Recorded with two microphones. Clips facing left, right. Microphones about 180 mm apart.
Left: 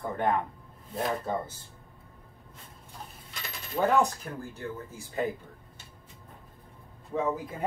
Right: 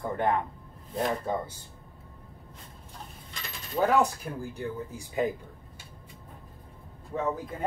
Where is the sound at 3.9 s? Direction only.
10° right (ahead or behind).